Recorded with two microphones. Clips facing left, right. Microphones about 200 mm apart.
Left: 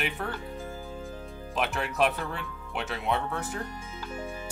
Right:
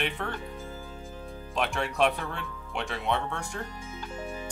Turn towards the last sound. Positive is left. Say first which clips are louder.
# left 1 dB
turn(degrees=5)  # may be behind; listen again after turning